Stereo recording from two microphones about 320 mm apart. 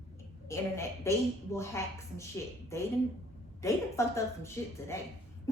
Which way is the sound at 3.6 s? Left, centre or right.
Centre.